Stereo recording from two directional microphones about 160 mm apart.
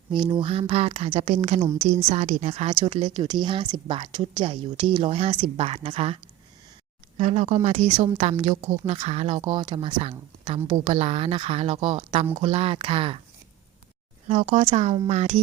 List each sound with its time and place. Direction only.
0.1 s speech: 30° right (ahead or behind); by 2.7 s 45° right (ahead or behind)
3.0 s speech: 30° right (ahead or behind)
7.2 s speech: 45° right (ahead or behind)
14.3 s speech: 45° right (ahead or behind)